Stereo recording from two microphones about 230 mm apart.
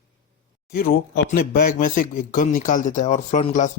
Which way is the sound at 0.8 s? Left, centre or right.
Left.